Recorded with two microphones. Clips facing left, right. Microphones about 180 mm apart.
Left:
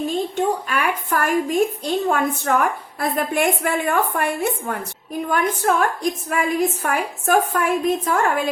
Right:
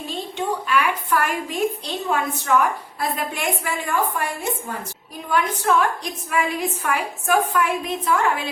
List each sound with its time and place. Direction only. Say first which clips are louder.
0.3 s a woman's voice: left 1 dB; 45° left (ahead or behind)